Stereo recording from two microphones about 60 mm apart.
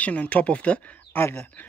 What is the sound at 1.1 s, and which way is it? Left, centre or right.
Speech, left.